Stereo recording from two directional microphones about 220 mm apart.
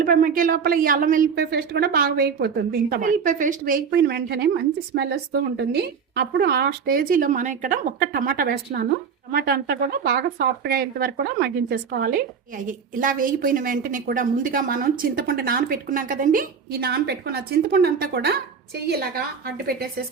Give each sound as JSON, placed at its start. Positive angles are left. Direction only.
{"t": 0.0, "sound": "a woman's voice", "side_deg": -40}